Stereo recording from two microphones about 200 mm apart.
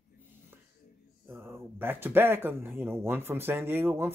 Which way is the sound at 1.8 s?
10° right (ahead or behind).